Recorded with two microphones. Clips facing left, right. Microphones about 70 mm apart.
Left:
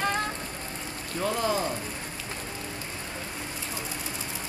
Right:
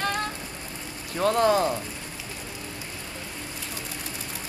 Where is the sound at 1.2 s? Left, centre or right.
Right.